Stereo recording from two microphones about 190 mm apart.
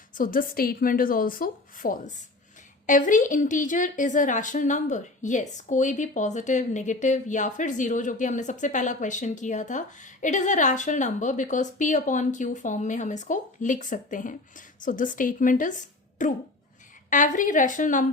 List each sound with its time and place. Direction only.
0.1 s a woman's voice: 45° left (ahead or behind)